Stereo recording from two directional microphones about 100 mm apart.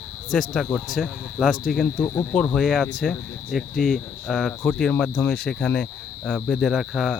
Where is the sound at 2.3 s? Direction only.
10° left (ahead or behind).